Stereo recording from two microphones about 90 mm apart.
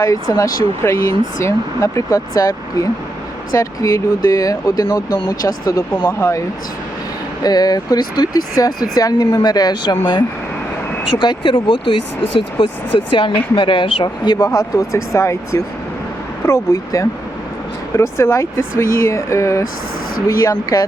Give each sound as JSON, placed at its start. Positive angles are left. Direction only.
{"t": 0.0, "sound": "speech", "side_deg": 40}
{"t": 7.4, "sound": "speech", "side_deg": 45}
{"t": 11.2, "sound": "speech", "side_deg": 60}
{"t": 12.6, "sound": "speech", "side_deg": 80}
{"t": 13.1, "sound": "a woman's voice", "side_deg": 70}
{"t": 14.3, "sound": "speech", "side_deg": 40}